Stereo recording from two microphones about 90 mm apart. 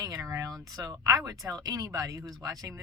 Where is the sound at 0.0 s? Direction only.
40° right (ahead or behind).